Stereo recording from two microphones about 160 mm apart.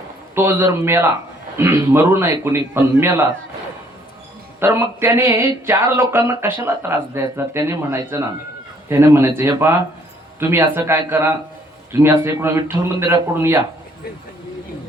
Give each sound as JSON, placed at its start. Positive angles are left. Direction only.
{"t": 0.3, "sound": "speech", "side_deg": -15}
{"t": 4.6, "sound": "speech", "side_deg": -15}